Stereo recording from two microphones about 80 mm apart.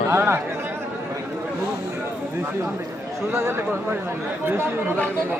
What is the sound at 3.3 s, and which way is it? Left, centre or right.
Speech, right.